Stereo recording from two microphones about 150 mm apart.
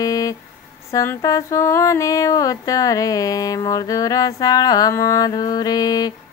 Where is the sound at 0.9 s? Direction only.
20° left (ahead or behind).